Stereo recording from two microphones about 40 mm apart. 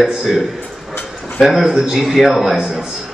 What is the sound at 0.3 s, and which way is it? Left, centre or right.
A man's voice, centre.